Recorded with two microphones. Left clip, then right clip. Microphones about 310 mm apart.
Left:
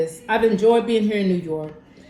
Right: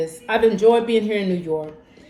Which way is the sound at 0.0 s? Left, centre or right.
Centre.